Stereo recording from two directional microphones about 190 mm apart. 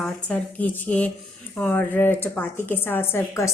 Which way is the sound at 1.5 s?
10° left (ahead or behind).